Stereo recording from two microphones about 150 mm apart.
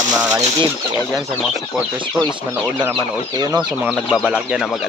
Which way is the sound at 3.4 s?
25° right (ahead or behind).